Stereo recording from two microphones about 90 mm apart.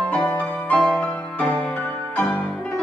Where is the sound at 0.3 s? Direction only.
10° left (ahead or behind).